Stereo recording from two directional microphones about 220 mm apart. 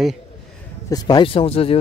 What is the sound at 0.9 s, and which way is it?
Speech, 20° left (ahead or behind).